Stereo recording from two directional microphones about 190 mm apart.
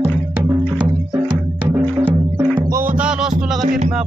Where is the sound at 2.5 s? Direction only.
10° right (ahead or behind).